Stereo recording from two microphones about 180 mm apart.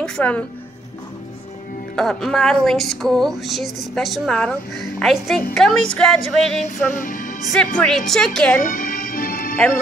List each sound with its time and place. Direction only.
0.0 s speech: 5° left (ahead or behind)
2.0 s speech: 5° left (ahead or behind)
6.9 s speech: 50° left (ahead or behind)
7.5 s speech: centre (ahead or behind)
8.6 s music: 50° left (ahead or behind)